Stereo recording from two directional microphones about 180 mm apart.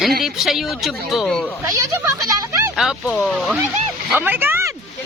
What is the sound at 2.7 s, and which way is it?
Speech, centre (ahead or behind).